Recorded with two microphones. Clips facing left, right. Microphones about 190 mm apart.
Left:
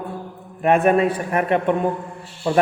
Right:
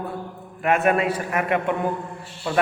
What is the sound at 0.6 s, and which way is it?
Speech, 30° left (ahead or behind).